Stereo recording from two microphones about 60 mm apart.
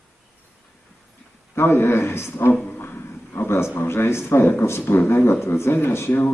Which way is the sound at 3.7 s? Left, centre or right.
Left.